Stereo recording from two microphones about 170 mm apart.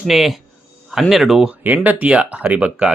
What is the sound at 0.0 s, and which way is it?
Speech, centre (ahead or behind).